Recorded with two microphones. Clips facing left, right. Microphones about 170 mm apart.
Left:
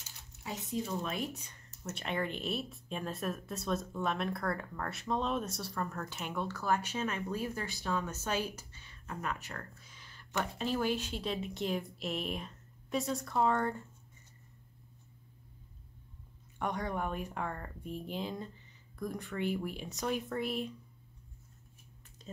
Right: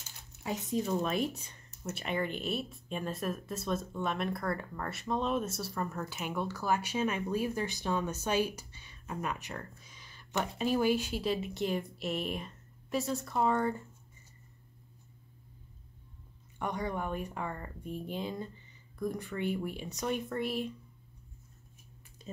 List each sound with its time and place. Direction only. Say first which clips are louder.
0.4 s speech: right 4 dB; 50° right (ahead or behind)
1.8 s speech: right 2 dB; 5° right (ahead or behind)
16.5 s speech: right 1 dB; centre (ahead or behind)
22.2 s a sound: right 3 dB; 10° right (ahead or behind)